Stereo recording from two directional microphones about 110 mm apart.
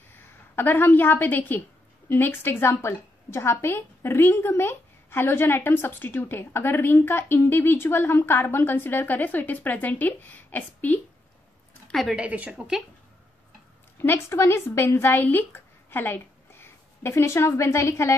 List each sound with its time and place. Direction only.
0.6 s a woman's voice: 20° left (ahead or behind)
11.9 s a woman's voice: centre (ahead or behind)
13.9 s speech: 20° left (ahead or behind)